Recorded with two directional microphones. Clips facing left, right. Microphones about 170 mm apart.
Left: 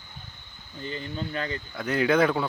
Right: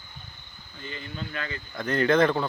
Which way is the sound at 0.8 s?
35° left (ahead or behind).